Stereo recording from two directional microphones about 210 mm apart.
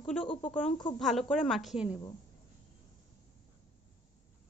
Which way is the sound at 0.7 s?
20° left (ahead or behind).